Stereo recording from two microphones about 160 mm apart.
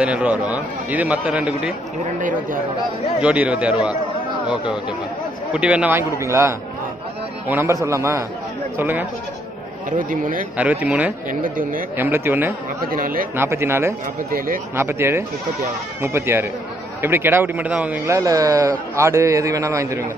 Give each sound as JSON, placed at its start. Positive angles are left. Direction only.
{"t": 0.0, "sound": "a man's voice", "side_deg": -10}
{"t": 3.2, "sound": "a man's voice", "side_deg": -10}
{"t": 9.8, "sound": "speech", "side_deg": -60}
{"t": 10.6, "sound": "a man's voice", "side_deg": -10}
{"t": 11.2, "sound": "speech", "side_deg": -60}
{"t": 12.0, "sound": "a man's voice", "side_deg": -15}
{"t": 12.8, "sound": "speech", "side_deg": -65}
{"t": 13.4, "sound": "a man's voice", "side_deg": -15}
{"t": 14.3, "sound": "speech", "side_deg": -65}
{"t": 14.8, "sound": "a man's voice", "side_deg": -15}